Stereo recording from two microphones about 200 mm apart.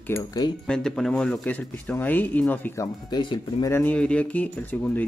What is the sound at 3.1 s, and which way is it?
Speech, 20° left (ahead or behind).